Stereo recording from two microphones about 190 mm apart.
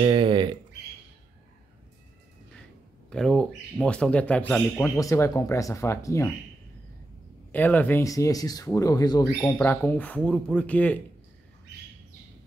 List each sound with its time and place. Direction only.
0.0 s speech: 25° right (ahead or behind)
3.1 s speech: 5° left (ahead or behind)
7.5 s speech: 10° left (ahead or behind)